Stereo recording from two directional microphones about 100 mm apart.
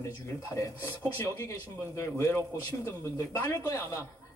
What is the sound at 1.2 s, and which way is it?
A man's voice, 30° left (ahead or behind).